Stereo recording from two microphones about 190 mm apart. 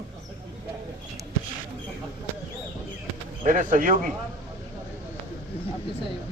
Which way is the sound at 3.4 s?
45° right (ahead or behind).